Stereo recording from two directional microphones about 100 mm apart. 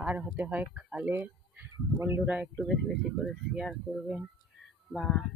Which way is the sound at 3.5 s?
Centre (ahead or behind).